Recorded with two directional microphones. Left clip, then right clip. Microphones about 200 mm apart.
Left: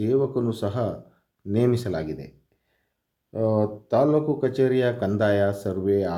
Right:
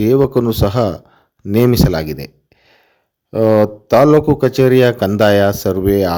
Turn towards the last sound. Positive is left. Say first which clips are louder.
# right 10 dB
turn(degrees=-35)  # may be behind; listen again after turning